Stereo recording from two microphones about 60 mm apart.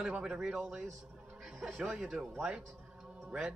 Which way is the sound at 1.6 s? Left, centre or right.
Centre.